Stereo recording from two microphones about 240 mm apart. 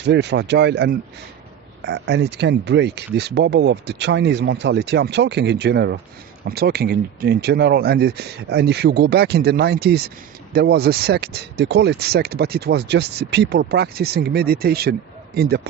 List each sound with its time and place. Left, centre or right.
0.0 s speech: right